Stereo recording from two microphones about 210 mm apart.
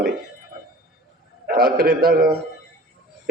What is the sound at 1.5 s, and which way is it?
Speech, 45° right (ahead or behind).